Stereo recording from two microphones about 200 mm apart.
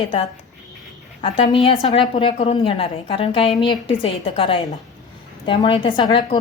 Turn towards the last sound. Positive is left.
turn(degrees=25)  # may be behind; listen again after turning